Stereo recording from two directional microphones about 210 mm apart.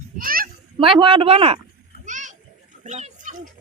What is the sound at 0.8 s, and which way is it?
Speech, 25° right (ahead or behind).